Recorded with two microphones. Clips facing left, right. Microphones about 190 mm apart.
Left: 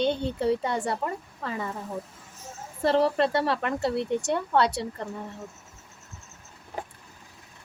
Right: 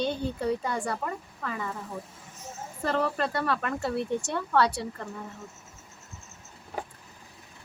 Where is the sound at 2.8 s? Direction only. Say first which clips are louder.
Left 6 dB; 30° left (ahead or behind).